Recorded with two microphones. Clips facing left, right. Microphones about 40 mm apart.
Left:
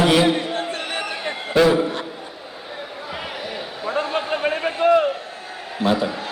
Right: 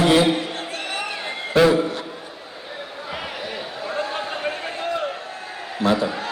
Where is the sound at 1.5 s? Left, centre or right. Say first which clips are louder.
Even; centre.